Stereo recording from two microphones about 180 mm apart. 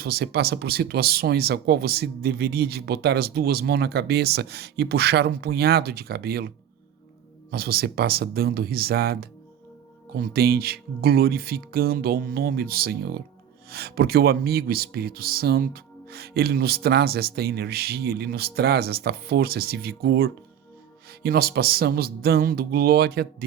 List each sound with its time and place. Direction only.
0.0 s speech: 60° right (ahead or behind)
7.5 s speech: 60° right (ahead or behind)